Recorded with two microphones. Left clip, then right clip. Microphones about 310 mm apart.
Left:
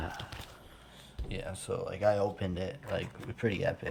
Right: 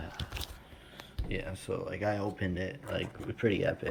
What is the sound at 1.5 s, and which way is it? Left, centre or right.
Speech, centre.